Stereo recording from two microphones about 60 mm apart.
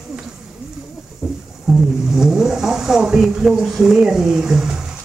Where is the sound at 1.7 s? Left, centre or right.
Centre.